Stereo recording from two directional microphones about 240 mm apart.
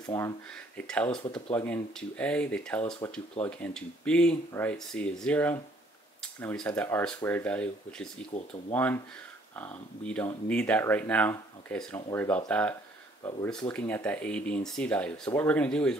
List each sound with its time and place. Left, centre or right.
0.0 s speech: centre
8.3 s speech: left
8.7 s speech: centre